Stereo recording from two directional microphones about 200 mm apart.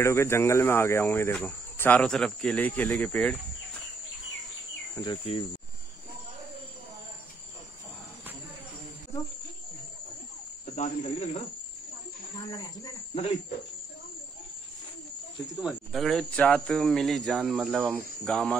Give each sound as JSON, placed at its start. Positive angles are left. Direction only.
{"t": 0.0, "sound": "speech", "side_deg": 15}
{"t": 4.9, "sound": "speech", "side_deg": 20}
{"t": 10.8, "sound": "speech", "side_deg": 30}
{"t": 12.4, "sound": "speech", "side_deg": 20}
{"t": 15.6, "sound": "speech", "side_deg": 0}